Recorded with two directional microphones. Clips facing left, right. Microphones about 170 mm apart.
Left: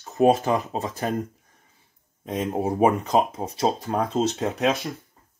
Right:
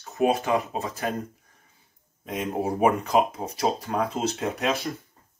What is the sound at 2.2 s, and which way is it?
Speech, 30° left (ahead or behind).